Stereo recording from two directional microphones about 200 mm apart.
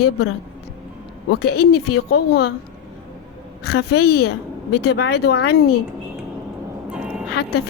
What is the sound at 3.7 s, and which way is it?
Speech, 55° left (ahead or behind).